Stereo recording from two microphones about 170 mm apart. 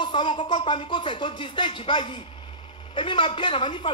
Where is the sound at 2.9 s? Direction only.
30° left (ahead or behind).